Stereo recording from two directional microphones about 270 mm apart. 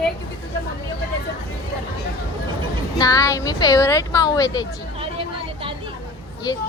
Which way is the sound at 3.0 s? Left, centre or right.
Centre.